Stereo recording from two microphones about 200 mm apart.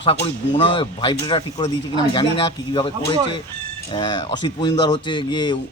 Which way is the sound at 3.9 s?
25° left (ahead or behind).